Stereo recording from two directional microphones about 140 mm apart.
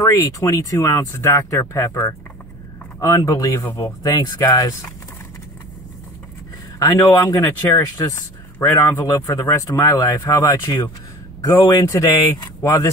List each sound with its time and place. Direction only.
0.0 s speech: 25° left (ahead or behind)
7.0 s speech: 20° left (ahead or behind)